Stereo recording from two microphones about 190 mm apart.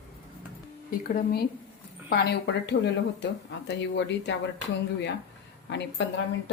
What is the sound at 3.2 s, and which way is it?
Speech, 65° left (ahead or behind).